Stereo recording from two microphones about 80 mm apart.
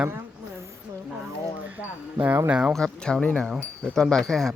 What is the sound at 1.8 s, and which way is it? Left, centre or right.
Speech, right.